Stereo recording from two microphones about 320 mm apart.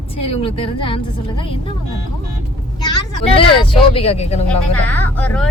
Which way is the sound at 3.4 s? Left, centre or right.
Centre.